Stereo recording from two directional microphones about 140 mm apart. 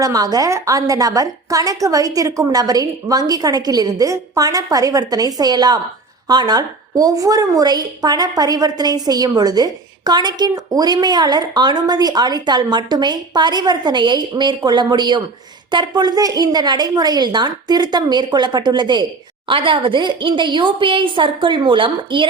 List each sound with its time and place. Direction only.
0.0 s a woman's voice: 25° right (ahead or behind)